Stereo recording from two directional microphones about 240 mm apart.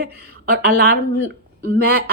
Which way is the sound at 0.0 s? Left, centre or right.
Right.